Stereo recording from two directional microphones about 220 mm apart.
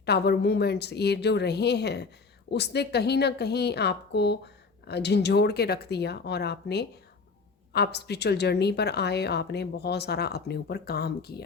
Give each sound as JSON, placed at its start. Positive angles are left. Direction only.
{"t": 0.0, "sound": "a woman's voice", "side_deg": 50}